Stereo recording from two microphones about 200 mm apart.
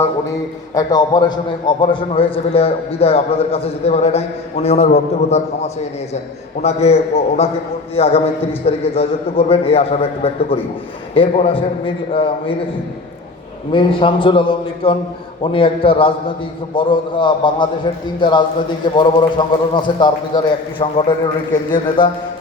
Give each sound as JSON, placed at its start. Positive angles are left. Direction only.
{"t": 0.7, "sound": "a man's voice", "side_deg": 20}
{"t": 13.7, "sound": "a man's voice", "side_deg": 25}